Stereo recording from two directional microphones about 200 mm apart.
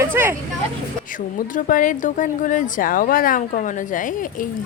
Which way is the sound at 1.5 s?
40° left (ahead or behind).